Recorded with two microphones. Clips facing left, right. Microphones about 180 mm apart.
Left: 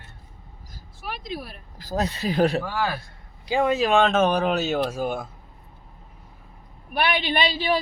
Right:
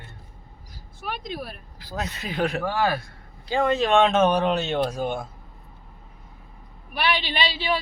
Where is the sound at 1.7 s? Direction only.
40° left (ahead or behind).